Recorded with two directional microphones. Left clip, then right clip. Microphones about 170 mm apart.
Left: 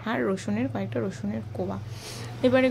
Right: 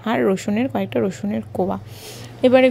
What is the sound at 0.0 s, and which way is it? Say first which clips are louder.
Speech: right 8 dB; 35° right (ahead or behind).